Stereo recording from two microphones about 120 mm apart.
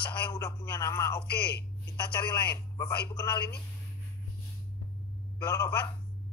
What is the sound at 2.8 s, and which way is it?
Speech, 35° left (ahead or behind).